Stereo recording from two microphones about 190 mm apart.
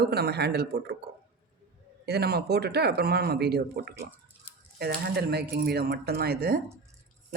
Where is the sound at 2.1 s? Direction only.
55° right (ahead or behind).